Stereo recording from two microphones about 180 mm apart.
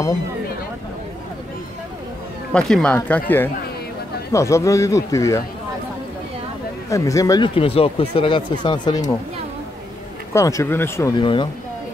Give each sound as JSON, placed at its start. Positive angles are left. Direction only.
{"t": 2.5, "sound": "speech", "side_deg": 5}
{"t": 6.9, "sound": "speech", "side_deg": 20}
{"t": 10.3, "sound": "speech", "side_deg": 15}
{"t": 11.1, "sound": "speech", "side_deg": 25}